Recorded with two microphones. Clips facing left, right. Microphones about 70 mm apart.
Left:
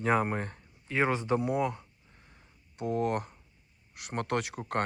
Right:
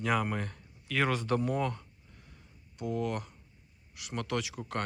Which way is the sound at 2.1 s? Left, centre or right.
Left.